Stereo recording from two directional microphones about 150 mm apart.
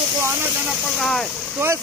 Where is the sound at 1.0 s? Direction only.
5° left (ahead or behind).